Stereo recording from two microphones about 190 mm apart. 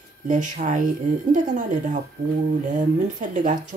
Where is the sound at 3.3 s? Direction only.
40° right (ahead or behind).